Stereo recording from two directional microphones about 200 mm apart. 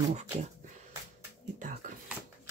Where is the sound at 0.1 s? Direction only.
35° right (ahead or behind).